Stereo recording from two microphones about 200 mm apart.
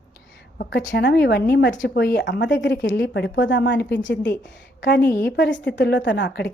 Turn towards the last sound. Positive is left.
turn(degrees=55)  # may be behind; listen again after turning